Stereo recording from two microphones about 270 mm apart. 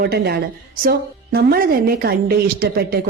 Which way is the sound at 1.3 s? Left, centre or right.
Right.